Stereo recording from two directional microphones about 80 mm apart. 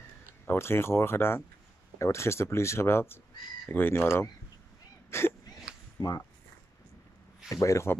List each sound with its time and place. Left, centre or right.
0.5 s speech: left
5.9 s speech: left
7.4 s speech: left